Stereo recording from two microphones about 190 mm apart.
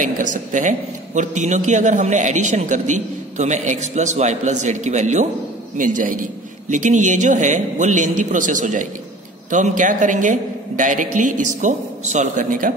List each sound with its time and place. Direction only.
0.0 s a man's voice: 40° right (ahead or behind)